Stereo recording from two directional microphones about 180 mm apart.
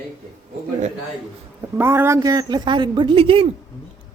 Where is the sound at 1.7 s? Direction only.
15° right (ahead or behind); by 3.4 s 30° right (ahead or behind).